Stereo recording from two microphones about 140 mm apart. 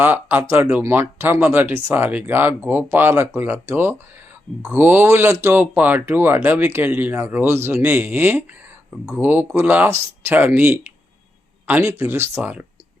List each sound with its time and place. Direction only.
0.0 s speech: 15° right (ahead or behind)